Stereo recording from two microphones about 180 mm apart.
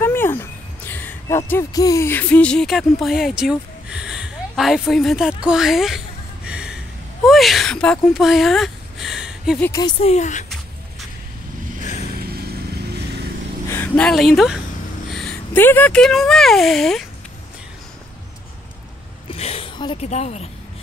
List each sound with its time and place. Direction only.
0.0 s a sound: 10° left (ahead or behind); by 6.8 s 5° right (ahead or behind)
7.2 s speech: centre (ahead or behind)
9.6 s speech: 20° left (ahead or behind); by 10.4 s 40° left (ahead or behind)
11.8 s vehicle: 40° left (ahead or behind)
12.2 s vehicle: 60° right (ahead or behind)
13.7 s speech: 10° left (ahead or behind)
19.3 s a sound: 35° left (ahead or behind)
20.1 s speech: 40° left (ahead or behind)